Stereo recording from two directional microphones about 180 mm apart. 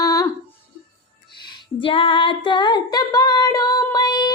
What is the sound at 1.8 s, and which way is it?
Female singing, 30° left (ahead or behind).